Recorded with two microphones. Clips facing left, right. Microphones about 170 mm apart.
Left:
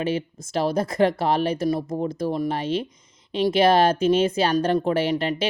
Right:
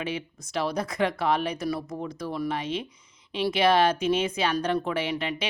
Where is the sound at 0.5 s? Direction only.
40° left (ahead or behind).